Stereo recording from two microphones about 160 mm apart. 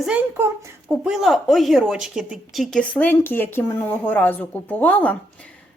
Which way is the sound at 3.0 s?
10° left (ahead or behind).